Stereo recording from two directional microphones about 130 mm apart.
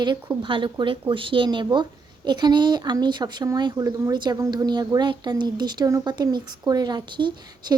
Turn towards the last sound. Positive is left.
turn(degrees=-35)  # may be behind; listen again after turning